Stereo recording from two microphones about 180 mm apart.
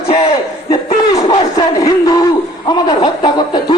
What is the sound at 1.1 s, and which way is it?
Speech, 20° left (ahead or behind).